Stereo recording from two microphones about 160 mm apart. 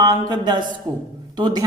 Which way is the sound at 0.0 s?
25° right (ahead or behind).